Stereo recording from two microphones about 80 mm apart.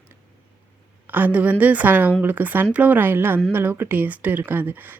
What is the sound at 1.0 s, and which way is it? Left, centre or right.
Speech, right.